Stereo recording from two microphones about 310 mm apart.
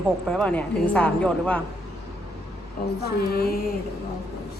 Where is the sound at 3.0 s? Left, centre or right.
Left.